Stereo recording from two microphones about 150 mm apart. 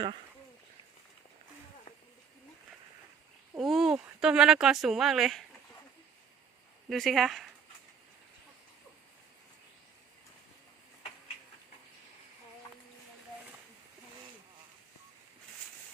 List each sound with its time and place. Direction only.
3.6 s speech: centre (ahead or behind)
6.9 s speech: centre (ahead or behind)